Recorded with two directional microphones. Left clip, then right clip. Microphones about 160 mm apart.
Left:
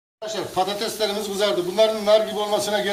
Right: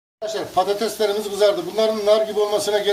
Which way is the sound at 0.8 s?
75° right (ahead or behind).